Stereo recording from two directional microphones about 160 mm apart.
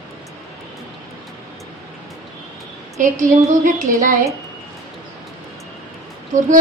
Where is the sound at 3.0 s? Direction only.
50° right (ahead or behind).